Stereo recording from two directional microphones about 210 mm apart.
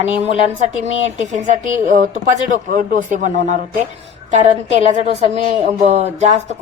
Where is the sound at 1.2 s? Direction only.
35° right (ahead or behind).